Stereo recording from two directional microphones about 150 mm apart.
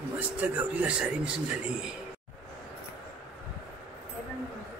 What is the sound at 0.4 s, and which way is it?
Speech, 10° right (ahead or behind).